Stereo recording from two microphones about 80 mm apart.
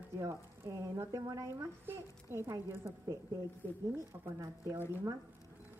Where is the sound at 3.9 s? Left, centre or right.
Right.